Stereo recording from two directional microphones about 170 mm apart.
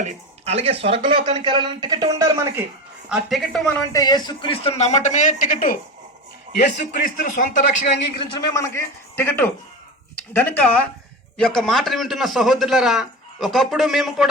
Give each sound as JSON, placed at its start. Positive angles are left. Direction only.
{"t": 0.0, "sound": "speech", "side_deg": -40}
{"t": 3.1, "sound": "a man's voice", "side_deg": -5}
{"t": 3.9, "sound": "speech", "side_deg": 25}
{"t": 7.0, "sound": "speech", "side_deg": 50}
{"t": 8.4, "sound": "a man's voice", "side_deg": 20}